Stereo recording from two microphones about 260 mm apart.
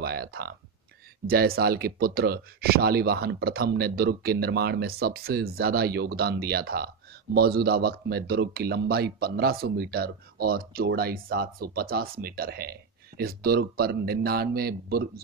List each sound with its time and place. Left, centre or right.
0.0 s speech: right